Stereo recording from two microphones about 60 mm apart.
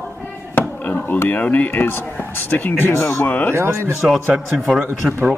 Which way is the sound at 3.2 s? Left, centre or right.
Left.